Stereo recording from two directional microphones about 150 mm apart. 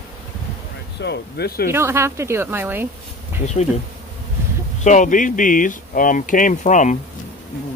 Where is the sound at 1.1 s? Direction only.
90° left.